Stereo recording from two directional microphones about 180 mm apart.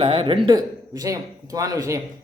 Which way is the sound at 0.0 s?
30° right (ahead or behind).